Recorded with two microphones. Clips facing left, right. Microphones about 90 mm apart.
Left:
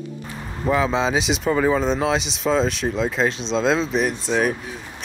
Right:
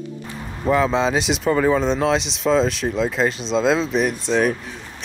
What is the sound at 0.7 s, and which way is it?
Speech, centre (ahead or behind).